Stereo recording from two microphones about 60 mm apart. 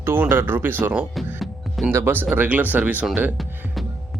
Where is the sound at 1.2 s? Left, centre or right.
Centre.